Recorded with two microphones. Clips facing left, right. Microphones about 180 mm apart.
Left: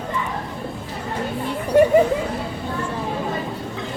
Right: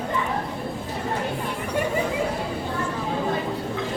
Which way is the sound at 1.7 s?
45° left (ahead or behind).